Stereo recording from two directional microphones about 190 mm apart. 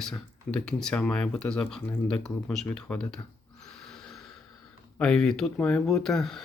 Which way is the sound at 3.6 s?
Centre (ahead or behind).